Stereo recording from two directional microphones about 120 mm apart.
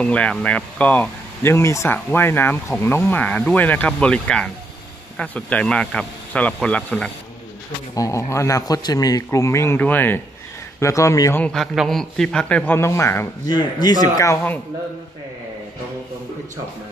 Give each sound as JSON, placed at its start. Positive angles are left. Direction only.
{"t": 0.0, "sound": "speech", "side_deg": 10}
{"t": 7.9, "sound": "speech", "side_deg": 30}
{"t": 11.4, "sound": "speech", "side_deg": 0}
{"t": 13.5, "sound": "speech", "side_deg": 35}
{"t": 14.1, "sound": "speech", "side_deg": 25}